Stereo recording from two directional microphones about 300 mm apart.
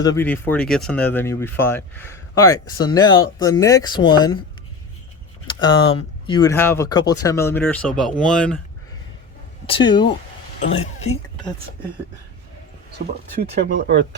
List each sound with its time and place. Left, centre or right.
0.0 s speech: centre
5.5 s a sound: centre
6.2 s speech: centre
9.6 s speech: centre
10.6 s a woman's voice: left
13.4 s speech: right